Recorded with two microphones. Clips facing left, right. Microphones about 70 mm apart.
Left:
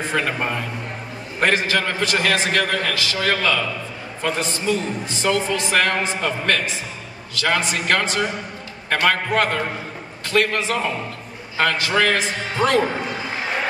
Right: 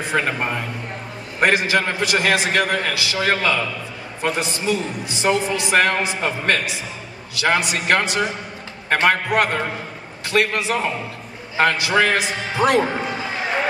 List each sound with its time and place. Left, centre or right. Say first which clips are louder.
0.3 s a man's voice: even; centre